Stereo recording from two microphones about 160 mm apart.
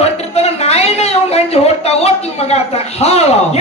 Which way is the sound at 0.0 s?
40° left (ahead or behind).